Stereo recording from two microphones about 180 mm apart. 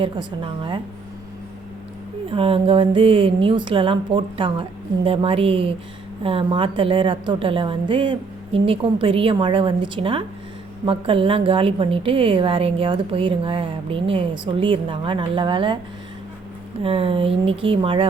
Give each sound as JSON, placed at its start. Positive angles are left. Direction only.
{"t": 0.0, "sound": "a woman's voice", "side_deg": -25}
{"t": 2.3, "sound": "a woman's voice", "side_deg": -30}
{"t": 16.8, "sound": "speech", "side_deg": -30}